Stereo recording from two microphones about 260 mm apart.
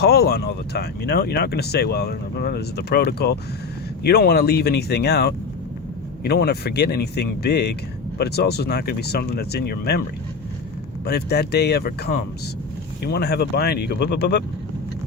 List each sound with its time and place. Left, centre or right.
0.0 s speech: left
11.0 s speech: left